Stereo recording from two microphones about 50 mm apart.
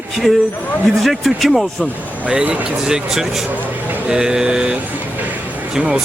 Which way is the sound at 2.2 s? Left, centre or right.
Right.